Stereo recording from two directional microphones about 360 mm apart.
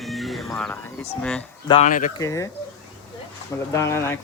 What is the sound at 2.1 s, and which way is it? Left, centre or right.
Speech, centre.